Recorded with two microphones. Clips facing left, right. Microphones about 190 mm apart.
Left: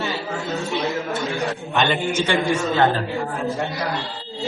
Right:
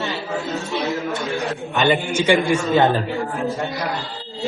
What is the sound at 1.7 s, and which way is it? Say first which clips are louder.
Speech: right 4 dB; centre (ahead or behind).